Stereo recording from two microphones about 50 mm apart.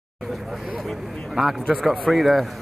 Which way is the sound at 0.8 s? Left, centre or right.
Centre.